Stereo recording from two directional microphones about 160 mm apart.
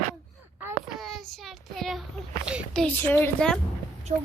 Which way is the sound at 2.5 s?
5° right (ahead or behind).